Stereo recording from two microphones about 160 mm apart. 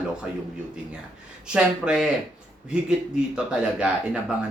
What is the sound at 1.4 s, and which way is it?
Speech, 5° right (ahead or behind).